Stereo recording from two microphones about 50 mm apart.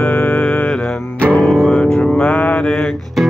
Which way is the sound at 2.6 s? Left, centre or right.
Centre.